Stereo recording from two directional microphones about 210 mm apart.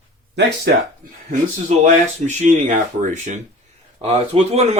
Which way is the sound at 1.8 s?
35° right (ahead or behind).